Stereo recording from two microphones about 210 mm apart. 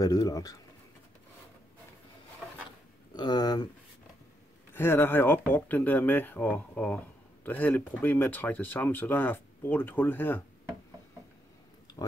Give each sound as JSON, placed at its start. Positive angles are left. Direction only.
{"t": 0.0, "sound": "speech", "side_deg": 15}
{"t": 3.2, "sound": "speech", "side_deg": 20}
{"t": 4.7, "sound": "speech", "side_deg": 10}